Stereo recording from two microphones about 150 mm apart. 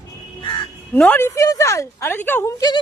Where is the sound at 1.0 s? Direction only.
15° left (ahead or behind).